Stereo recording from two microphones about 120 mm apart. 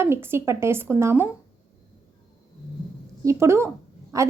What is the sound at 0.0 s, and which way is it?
A woman's voice, 20° right (ahead or behind).